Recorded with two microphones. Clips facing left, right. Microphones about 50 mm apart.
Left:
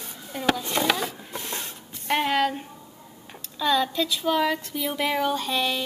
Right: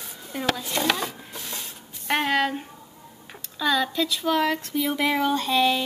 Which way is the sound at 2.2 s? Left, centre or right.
Centre.